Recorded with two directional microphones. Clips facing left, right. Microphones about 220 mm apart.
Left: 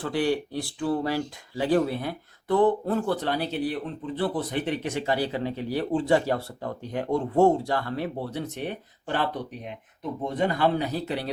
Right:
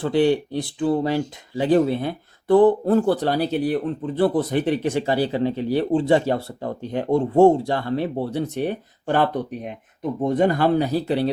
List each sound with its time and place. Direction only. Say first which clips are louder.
0.0 s speech: right 7 dB; 25° right (ahead or behind)